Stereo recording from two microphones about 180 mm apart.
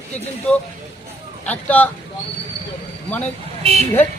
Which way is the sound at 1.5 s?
10° left (ahead or behind).